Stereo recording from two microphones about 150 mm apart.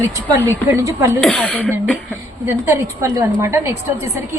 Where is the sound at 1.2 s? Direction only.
5° left (ahead or behind).